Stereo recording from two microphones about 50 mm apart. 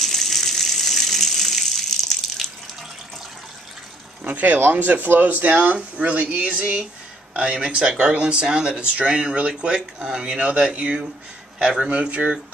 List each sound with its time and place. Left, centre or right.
0.0 s water: centre
4.3 s speech: right
7.5 s speech: centre